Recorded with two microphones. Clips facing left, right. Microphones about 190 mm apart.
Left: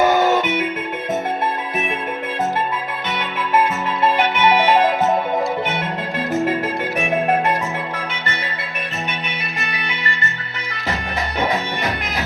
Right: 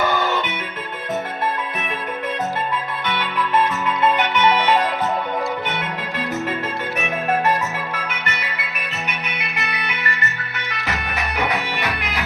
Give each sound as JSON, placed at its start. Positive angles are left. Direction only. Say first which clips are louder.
{"t": 0.0, "sound": "music", "louder": "left 6 dB", "side_deg": 45}
{"t": 4.7, "sound": "music", "louder": "left 4 dB", "side_deg": 45}
{"t": 7.0, "sound": "music", "louder": "left 3 dB", "side_deg": 30}
{"t": 11.3, "sound": "music", "louder": "left 2 dB", "side_deg": 30}